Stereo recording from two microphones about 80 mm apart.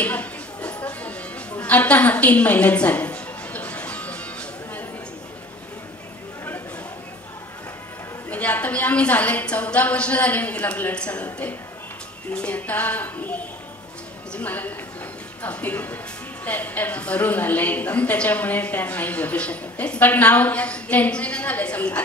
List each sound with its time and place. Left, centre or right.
0.0 s a sound: centre
1.6 s music: centre
8.3 s a woman's voice: centre